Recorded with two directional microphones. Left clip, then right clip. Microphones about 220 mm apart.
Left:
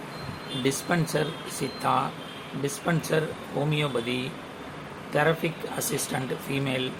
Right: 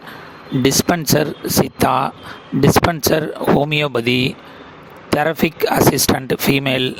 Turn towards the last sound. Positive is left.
turn(degrees=-50)  # may be behind; listen again after turning